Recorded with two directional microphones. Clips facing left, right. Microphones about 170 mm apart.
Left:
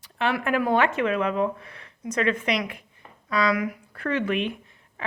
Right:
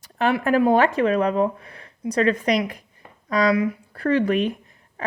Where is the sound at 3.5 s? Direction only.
30° right (ahead or behind).